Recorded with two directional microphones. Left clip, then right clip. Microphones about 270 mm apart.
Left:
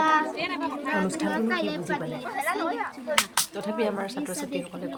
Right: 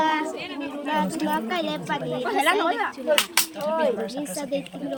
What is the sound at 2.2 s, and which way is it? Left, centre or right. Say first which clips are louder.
Speech: right 7 dB; right.